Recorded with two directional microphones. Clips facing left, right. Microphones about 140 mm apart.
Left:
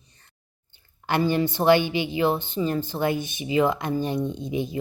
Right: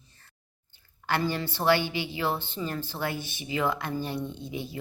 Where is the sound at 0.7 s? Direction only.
15° left (ahead or behind).